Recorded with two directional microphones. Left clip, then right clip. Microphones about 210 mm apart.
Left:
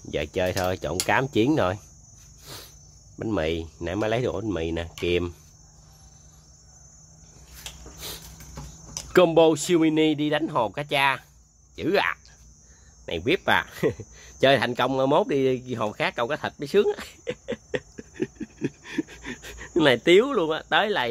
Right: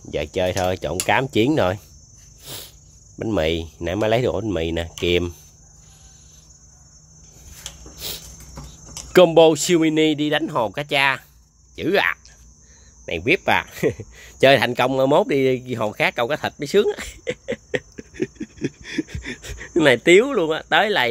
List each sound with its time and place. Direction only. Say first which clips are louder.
0.0 s speech: right 4 dB; centre (ahead or behind)
2.4 s cricket: right 6 dB; 10° right (ahead or behind)
3.2 s speech: right 5 dB; 10° right (ahead or behind)
7.6 s a sound: right 5 dB; 5° right (ahead or behind)
9.1 s speech: right 5 dB; 10° right (ahead or behind)